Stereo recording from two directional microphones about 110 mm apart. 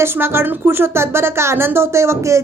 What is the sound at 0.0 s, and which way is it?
Speech, 20° right (ahead or behind).